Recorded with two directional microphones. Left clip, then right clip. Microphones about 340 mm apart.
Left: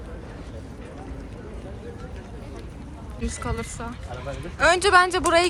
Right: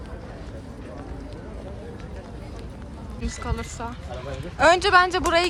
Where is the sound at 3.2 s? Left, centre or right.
Centre.